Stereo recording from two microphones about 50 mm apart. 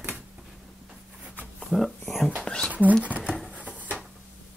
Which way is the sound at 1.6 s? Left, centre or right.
Centre.